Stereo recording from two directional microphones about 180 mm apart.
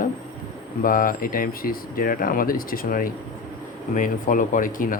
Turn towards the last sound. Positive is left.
turn(degrees=50)  # may be behind; listen again after turning